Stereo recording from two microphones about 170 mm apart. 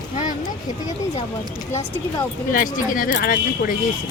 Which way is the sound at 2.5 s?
55° left (ahead or behind).